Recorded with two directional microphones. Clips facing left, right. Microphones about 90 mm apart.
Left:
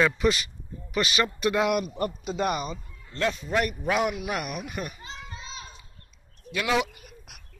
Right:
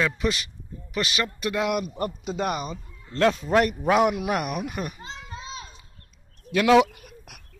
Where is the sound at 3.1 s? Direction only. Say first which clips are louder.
Right 6 dB; 75° right (ahead or behind).